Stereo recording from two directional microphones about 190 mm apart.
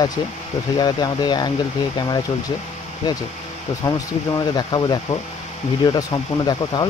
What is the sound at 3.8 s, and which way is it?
Speech, 20° left (ahead or behind).